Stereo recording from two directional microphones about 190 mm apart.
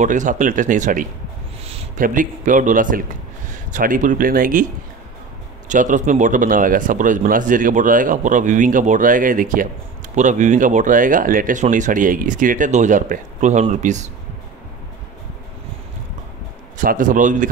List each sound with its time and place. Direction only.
0.0 s speech: 40° right (ahead or behind)
5.7 s speech: 40° right (ahead or behind)
16.7 s speech: 45° right (ahead or behind)